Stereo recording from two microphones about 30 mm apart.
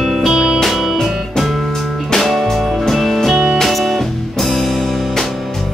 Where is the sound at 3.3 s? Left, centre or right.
Right.